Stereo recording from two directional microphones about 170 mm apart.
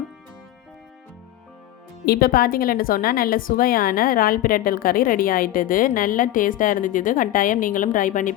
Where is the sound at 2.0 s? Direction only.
65° left (ahead or behind).